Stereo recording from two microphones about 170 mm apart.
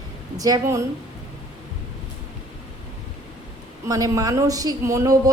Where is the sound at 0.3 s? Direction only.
20° right (ahead or behind).